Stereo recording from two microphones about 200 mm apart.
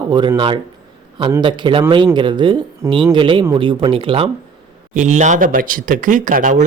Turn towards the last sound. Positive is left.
turn(degrees=-40)  # may be behind; listen again after turning